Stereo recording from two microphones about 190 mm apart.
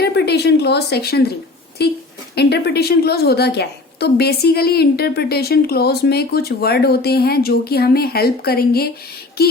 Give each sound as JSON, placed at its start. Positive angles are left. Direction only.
{"t": 0.0, "sound": "speech", "side_deg": 60}
{"t": 2.3, "sound": "a woman's voice", "side_deg": 60}